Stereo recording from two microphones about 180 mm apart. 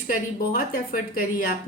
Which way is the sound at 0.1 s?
50° left (ahead or behind).